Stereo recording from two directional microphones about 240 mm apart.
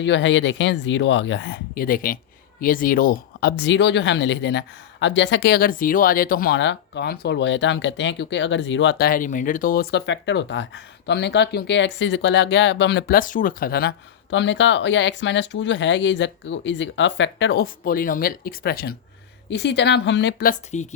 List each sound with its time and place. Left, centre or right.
0.0 s speech: left
20.5 s speech: left